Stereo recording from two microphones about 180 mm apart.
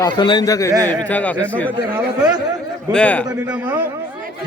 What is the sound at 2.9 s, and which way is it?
Speech, 5° left (ahead or behind).